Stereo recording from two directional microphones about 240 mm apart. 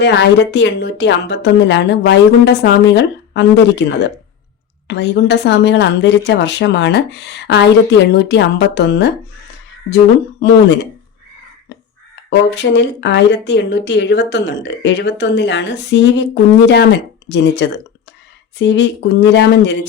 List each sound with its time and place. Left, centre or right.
0.0 s speech: left
12.5 s speech: left